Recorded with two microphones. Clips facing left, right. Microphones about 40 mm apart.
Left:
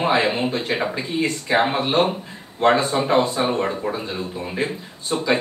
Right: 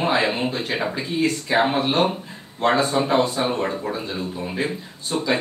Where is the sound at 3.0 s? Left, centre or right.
Centre.